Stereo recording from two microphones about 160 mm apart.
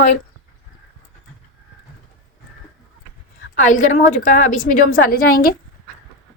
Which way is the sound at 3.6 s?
50° left (ahead or behind).